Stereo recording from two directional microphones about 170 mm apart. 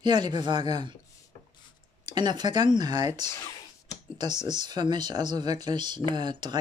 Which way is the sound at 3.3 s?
20° left (ahead or behind).